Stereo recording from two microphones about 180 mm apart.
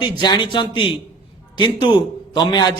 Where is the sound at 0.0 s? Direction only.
25° left (ahead or behind).